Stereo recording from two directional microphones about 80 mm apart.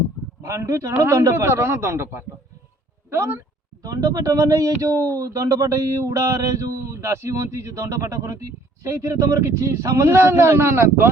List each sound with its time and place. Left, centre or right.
0.4 s mantra: right
3.9 s speech: right
5.1 s mantra: right